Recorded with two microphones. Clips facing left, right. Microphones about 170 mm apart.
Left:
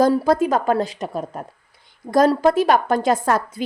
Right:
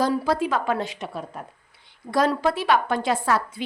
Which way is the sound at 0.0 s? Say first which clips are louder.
Left 6 dB; 45° left (ahead or behind).